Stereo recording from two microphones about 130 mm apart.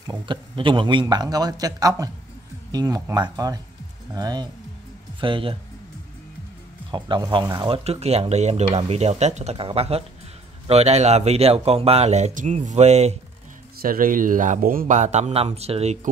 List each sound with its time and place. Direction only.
0.0 s a man's voice: 35° right (ahead or behind)
5.2 s speech: 40° right (ahead or behind)
6.9 s a man's voice: 35° right (ahead or behind)
7.7 s a man's voice: 50° right (ahead or behind)
13.8 s speech: 90° right; by 16.1 s 60° right (ahead or behind)